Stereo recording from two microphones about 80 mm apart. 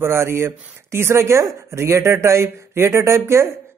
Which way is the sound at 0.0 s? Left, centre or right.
Right.